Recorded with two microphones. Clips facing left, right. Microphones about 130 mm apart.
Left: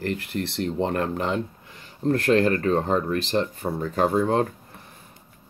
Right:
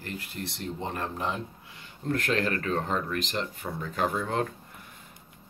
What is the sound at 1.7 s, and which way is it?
Speech, 40° left (ahead or behind).